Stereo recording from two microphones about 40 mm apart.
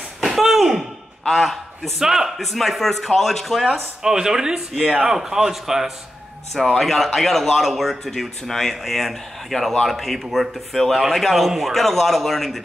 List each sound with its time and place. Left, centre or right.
0.2 s a sound: centre
1.3 s a man's voice: centre
2.4 s speech: centre
4.0 s speech: centre